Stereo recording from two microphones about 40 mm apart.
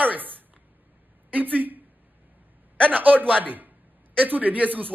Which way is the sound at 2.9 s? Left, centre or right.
Right.